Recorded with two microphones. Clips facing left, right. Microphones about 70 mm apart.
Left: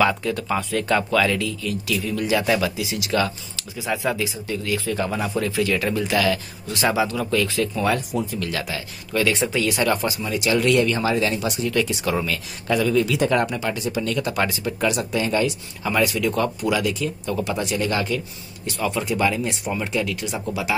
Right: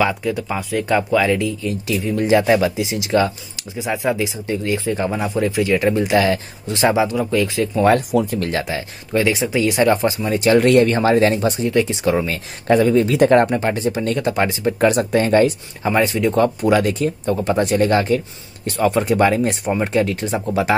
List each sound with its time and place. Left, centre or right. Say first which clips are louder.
0.0 s speech: right 1 dB; centre
7.8 s speech: right 11 dB; right
8.4 s speech: right 5 dB; right
10.3 s speech: right 6 dB; right
11.7 s speech: right 4 dB; right
14.7 s speech: right 7 dB; right